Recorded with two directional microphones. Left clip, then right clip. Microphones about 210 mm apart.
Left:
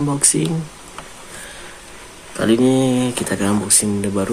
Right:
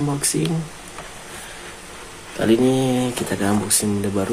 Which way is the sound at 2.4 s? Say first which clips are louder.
Left 2 dB; 15° left (ahead or behind).